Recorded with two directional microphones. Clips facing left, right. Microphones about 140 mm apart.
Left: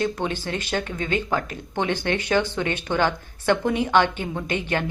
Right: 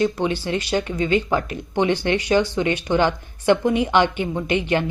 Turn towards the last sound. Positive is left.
turn(degrees=-15)  # may be behind; listen again after turning